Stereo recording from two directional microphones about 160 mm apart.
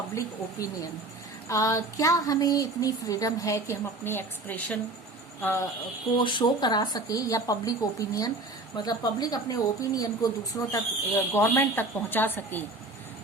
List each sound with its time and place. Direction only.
0.1 s speech: 20° left (ahead or behind)
6.1 s speech: 30° left (ahead or behind); by 12.6 s 10° left (ahead or behind)